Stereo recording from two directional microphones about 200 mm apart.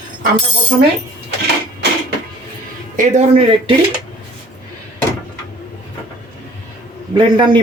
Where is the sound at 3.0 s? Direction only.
30° right (ahead or behind).